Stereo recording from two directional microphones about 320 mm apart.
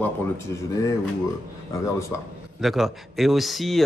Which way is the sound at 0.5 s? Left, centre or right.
Centre.